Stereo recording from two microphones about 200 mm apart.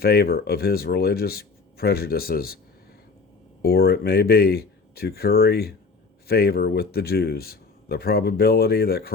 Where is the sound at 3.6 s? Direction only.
50° left (ahead or behind).